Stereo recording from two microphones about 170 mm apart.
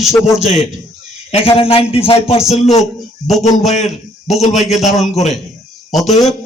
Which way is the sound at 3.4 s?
40° left (ahead or behind).